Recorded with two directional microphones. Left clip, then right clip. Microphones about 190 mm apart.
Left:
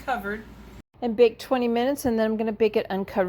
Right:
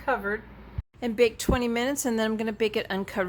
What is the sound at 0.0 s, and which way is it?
Speech, 30° right (ahead or behind).